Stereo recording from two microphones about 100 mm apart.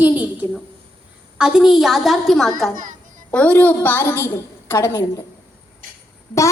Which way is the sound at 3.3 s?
15° left (ahead or behind).